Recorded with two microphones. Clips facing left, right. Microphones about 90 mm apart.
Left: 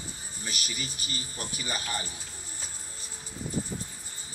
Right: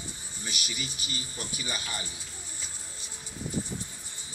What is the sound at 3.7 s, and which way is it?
Rustling leaves, 35° left (ahead or behind).